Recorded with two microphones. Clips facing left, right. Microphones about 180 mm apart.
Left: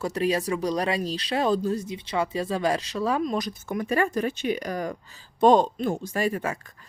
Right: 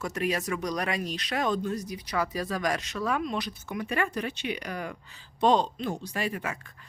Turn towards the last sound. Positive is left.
turn(degrees=40)  # may be behind; listen again after turning